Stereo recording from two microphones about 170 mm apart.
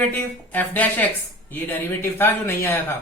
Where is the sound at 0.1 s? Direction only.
10° left (ahead or behind).